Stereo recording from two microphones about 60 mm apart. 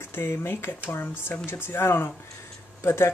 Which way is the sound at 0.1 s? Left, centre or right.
Left.